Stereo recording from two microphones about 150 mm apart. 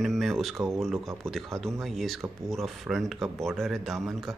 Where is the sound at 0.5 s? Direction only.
20° right (ahead or behind).